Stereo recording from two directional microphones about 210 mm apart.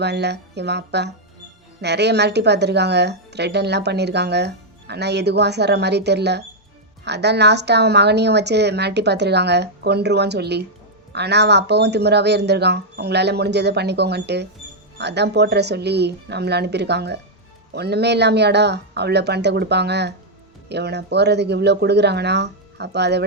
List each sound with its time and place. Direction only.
0.0 s a woman's voice: 55° right (ahead or behind)